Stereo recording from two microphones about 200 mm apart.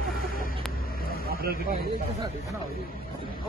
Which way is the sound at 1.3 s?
50° right (ahead or behind).